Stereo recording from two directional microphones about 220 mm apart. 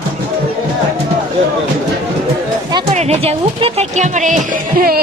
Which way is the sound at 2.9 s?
30° right (ahead or behind).